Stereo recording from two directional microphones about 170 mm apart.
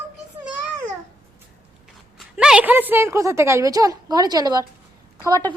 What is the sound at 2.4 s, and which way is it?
A woman's voice, 5° right (ahead or behind).